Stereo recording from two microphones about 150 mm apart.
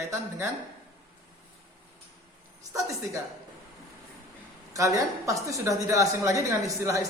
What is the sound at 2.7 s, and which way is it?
Speech, 20° right (ahead or behind).